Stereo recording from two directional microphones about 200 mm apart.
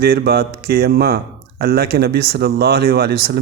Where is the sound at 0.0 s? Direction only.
50° right (ahead or behind).